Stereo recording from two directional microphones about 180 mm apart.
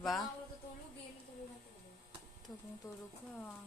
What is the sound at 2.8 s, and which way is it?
Speech, 15° left (ahead or behind).